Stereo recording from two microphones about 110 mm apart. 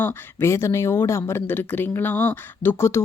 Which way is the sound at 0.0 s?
20° left (ahead or behind).